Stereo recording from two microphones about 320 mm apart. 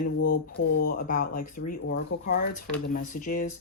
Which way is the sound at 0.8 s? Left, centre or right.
Left.